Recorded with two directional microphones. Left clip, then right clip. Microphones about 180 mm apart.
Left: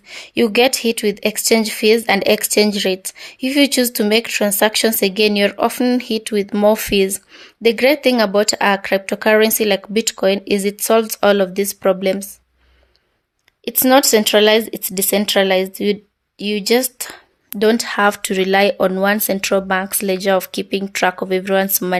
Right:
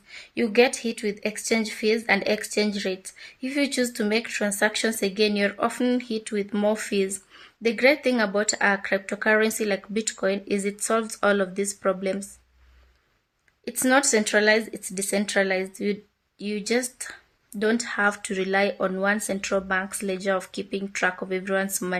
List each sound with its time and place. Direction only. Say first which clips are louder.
0.1 s a sound: left 10 dB; 40° left (ahead or behind)
0.8 s speech: left 11 dB; 40° left (ahead or behind)
13.7 s speech: left 9 dB; 35° left (ahead or behind)